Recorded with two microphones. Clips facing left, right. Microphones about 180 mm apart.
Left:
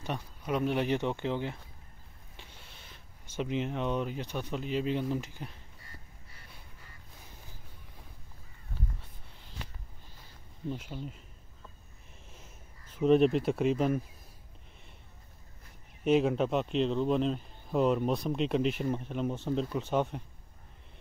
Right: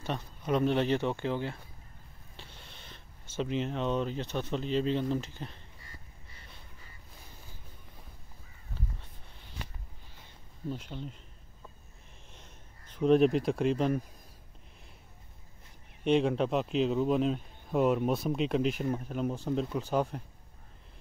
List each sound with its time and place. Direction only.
0.0 s speech: 10° left (ahead or behind)
10.7 s speech: 5° left (ahead or behind)
12.3 s a sound: 5° left (ahead or behind)
16.0 s speech: 5° left (ahead or behind)